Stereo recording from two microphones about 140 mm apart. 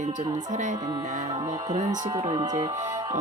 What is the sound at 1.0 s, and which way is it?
Speech, 65° right (ahead or behind).